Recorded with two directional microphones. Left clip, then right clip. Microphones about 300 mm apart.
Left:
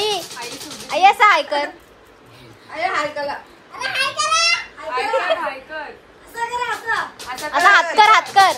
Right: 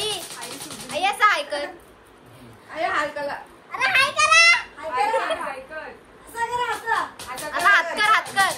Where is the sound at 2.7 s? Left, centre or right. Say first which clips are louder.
Left 3 dB; centre.